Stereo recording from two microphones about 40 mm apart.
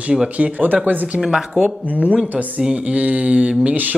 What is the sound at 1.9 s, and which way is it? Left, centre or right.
Mantra, right.